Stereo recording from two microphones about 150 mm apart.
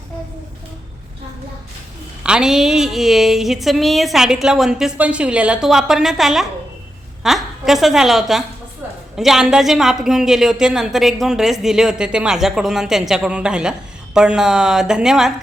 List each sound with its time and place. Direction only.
2.2 s a woman's voice: 5° right (ahead or behind)